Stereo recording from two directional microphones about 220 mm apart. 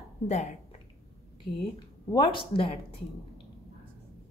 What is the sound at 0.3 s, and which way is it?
Speech, 30° left (ahead or behind).